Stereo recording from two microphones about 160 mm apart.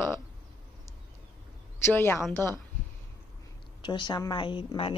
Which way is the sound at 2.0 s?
15° left (ahead or behind).